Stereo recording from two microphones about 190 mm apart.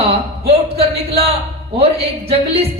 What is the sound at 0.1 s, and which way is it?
A man's voice, 30° right (ahead or behind).